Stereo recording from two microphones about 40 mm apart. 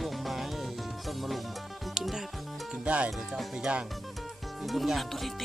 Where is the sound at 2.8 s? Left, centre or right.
Right.